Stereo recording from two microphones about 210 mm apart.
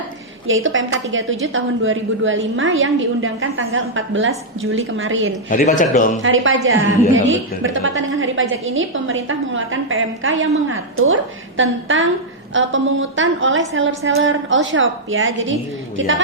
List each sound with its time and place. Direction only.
0.4 s a woman's voice: 70° right (ahead or behind)
5.5 s a man's voice: 40° left (ahead or behind)
6.2 s a woman's voice: 70° right (ahead or behind)
7.6 s a woman's voice: 65° right (ahead or behind)